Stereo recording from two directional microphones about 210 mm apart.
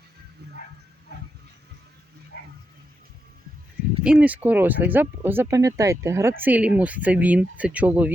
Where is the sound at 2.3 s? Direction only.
45° left (ahead or behind).